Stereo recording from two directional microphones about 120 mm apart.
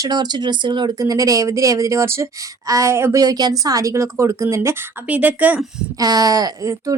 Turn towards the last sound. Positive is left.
turn(degrees=-25)  # may be behind; listen again after turning